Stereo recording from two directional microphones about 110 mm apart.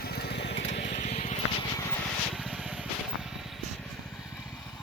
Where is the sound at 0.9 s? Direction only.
90° left.